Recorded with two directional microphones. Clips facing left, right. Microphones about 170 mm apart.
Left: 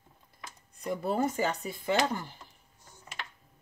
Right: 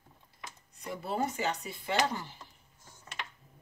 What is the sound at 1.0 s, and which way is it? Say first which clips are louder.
Speech: left 3 dB; 45° left (ahead or behind).